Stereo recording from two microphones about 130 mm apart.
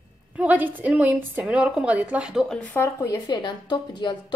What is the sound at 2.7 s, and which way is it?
Speech, 20° left (ahead or behind).